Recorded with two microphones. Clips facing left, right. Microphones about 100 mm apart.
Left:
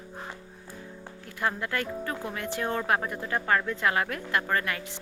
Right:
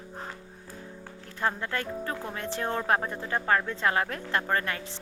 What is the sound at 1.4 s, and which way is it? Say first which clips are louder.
A woman's voice: even; 30° right (ahead or behind).